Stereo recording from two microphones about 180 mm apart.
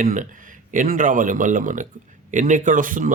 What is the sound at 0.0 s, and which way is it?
Speech, 50° right (ahead or behind).